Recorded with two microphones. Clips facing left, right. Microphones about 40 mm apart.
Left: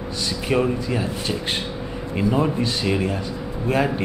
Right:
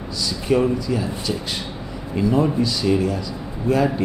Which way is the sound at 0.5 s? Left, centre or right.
Left.